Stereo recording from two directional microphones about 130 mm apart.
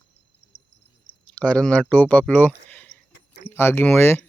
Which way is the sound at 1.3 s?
10° left (ahead or behind).